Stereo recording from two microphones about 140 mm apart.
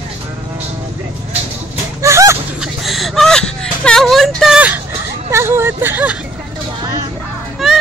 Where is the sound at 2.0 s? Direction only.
20° right (ahead or behind).